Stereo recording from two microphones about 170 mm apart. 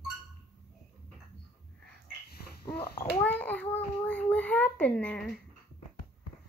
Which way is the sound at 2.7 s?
65° left (ahead or behind).